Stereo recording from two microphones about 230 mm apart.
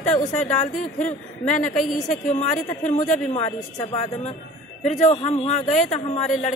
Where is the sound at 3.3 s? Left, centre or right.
Left.